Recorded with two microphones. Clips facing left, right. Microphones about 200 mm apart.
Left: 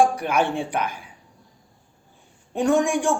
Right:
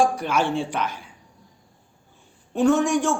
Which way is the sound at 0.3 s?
55° left (ahead or behind).